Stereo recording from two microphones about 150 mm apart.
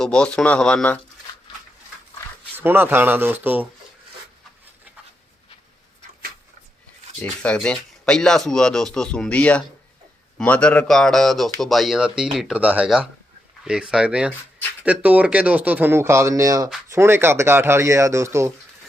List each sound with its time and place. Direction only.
0.0 s speech: 5° left (ahead or behind)
2.6 s speech: 15° right (ahead or behind)
7.2 s speech: 10° left (ahead or behind); by 18.5 s 20° right (ahead or behind)